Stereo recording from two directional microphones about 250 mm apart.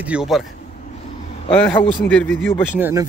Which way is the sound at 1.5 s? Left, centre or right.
Centre.